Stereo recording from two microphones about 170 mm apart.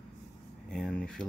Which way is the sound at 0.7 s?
5° left (ahead or behind).